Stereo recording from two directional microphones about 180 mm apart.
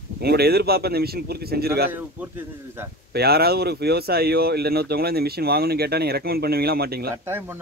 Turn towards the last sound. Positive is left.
turn(degrees=-15)  # may be behind; listen again after turning